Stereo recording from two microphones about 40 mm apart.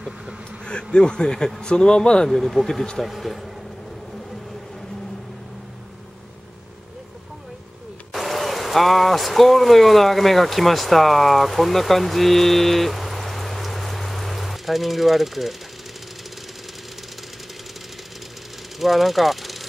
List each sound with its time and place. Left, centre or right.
0.9 s speech: centre
2.2 s speech: centre
8.1 s speech: centre
18.8 s speech: centre